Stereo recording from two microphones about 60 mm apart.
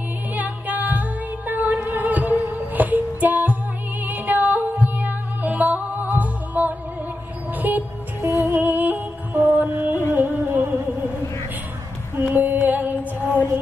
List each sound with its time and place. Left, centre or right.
0.3 s music: right
12.2 s female singing: right